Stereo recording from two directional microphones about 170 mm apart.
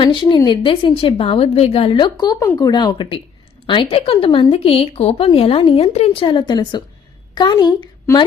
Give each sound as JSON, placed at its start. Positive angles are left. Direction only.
{"t": 0.0, "sound": "a woman's voice", "side_deg": 30}